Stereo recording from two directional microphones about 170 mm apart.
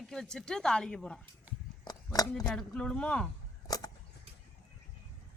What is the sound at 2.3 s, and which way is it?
Speech, 5° left (ahead or behind).